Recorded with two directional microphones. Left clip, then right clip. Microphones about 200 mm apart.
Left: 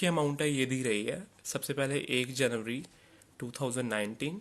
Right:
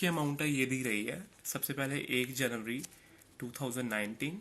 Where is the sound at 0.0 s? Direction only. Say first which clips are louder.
Left 4 dB; 40° left (ahead or behind).